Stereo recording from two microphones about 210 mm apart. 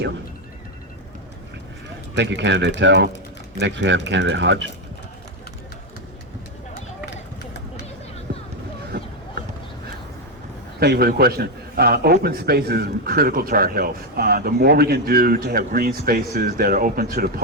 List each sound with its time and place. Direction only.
2.1 s speech: 55° right (ahead or behind)
8.3 s a sound: 55° right (ahead or behind)
10.8 s a man's voice: 50° right (ahead or behind)